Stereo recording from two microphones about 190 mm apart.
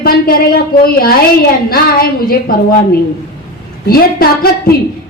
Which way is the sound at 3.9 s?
50° left (ahead or behind).